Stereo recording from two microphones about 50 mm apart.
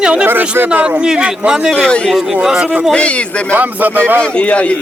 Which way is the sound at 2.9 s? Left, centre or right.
Left.